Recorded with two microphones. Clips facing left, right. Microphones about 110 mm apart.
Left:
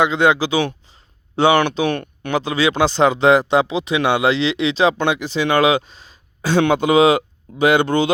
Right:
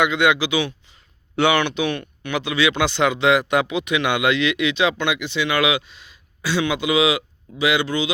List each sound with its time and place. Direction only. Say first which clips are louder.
0.0 s speech: left 3 dB; 35° left (ahead or behind); by 8.1 s 50° left (ahead or behind)